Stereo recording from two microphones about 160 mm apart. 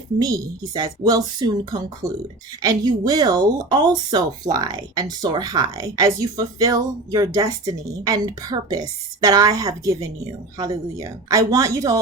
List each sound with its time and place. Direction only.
0.2 s speech: 25° right (ahead or behind)